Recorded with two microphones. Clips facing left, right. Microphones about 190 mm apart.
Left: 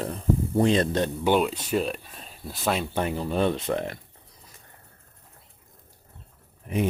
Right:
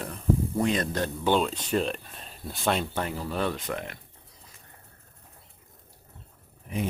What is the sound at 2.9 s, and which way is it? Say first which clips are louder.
Speech: left 4 dB; 20° left (ahead or behind).